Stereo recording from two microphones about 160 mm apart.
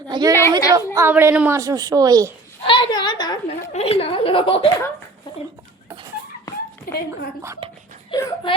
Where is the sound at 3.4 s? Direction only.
40° left (ahead or behind).